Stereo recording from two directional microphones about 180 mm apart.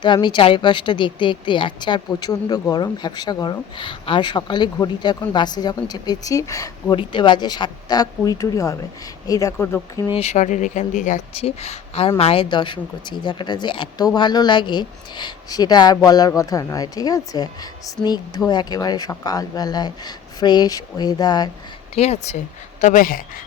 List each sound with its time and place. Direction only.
0.0 s speech: 25° left (ahead or behind)
10.1 s speech: 35° left (ahead or behind)
21.9 s speech: 35° left (ahead or behind)